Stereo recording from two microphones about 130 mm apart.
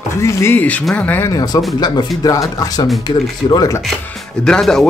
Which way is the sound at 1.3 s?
30° left (ahead or behind).